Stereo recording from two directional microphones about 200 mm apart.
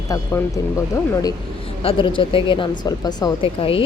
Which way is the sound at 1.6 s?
30° left (ahead or behind).